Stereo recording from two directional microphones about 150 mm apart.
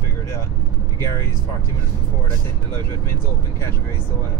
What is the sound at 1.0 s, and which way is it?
Speech, 20° left (ahead or behind).